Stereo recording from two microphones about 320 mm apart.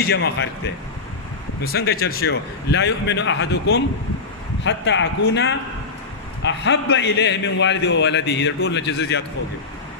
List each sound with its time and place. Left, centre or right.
0.0 s a man's voice: left
1.6 s a man's voice: left